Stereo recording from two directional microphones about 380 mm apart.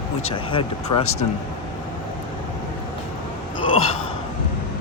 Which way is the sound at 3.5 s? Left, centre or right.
Centre.